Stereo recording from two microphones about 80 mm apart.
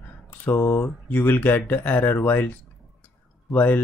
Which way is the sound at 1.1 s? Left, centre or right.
Left.